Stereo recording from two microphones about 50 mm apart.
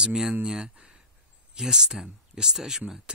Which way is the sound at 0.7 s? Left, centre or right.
Centre.